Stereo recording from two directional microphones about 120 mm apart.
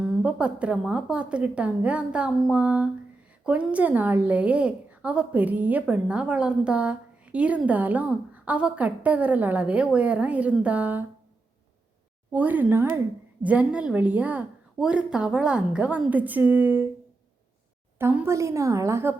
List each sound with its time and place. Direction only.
0.0 s a woman's voice: 10° right (ahead or behind)
12.3 s a woman's voice: 15° right (ahead or behind)
17.9 s a woman's voice: 20° right (ahead or behind)